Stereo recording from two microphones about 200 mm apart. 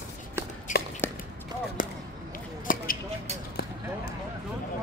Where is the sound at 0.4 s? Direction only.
10° right (ahead or behind).